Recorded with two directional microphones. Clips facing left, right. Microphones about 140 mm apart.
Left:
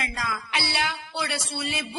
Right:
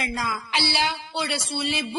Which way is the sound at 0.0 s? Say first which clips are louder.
Right 2 dB; 25° right (ahead or behind).